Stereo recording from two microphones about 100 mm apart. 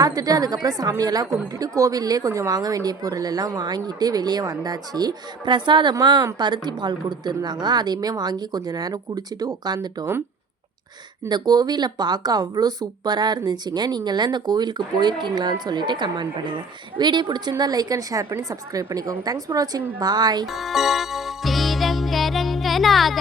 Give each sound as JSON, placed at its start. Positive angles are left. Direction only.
{"t": 0.0, "sound": "a woman's voice", "side_deg": -40}
{"t": 11.3, "sound": "a woman's voice", "side_deg": -45}
{"t": 20.5, "sound": "music", "side_deg": 0}